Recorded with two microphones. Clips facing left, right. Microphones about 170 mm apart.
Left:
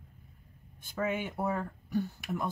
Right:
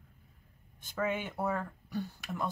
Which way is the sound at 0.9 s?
10° left (ahead or behind).